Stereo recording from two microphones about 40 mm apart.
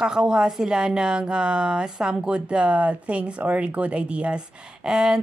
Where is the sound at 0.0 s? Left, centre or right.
Centre.